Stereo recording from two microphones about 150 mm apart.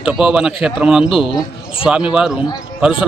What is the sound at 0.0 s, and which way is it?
Speech, 5° right (ahead or behind).